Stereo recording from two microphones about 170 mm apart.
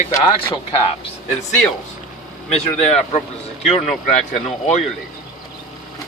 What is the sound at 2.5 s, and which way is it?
Speech, 40° left (ahead or behind).